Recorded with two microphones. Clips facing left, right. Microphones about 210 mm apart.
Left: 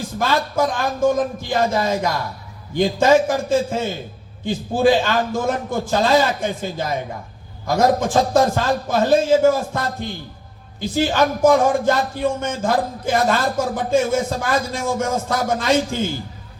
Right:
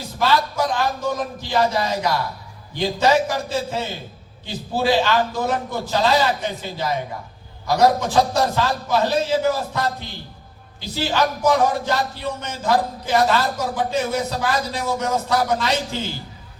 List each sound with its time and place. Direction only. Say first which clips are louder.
0.0 s speech: even; 50° left (ahead or behind)